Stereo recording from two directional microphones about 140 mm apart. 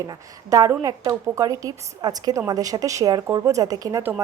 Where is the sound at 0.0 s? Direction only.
25° right (ahead or behind).